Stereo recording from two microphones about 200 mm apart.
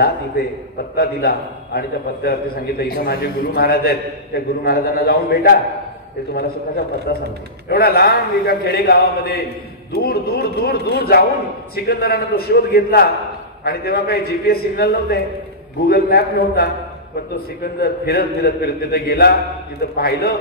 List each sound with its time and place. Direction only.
0.9 s a man's voice: 50° left (ahead or behind)
7.1 s a man's voice: 50° left (ahead or behind)
17.7 s a man's voice: 50° left (ahead or behind)